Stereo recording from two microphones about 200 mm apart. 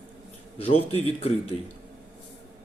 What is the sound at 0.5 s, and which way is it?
Speech, 30° left (ahead or behind).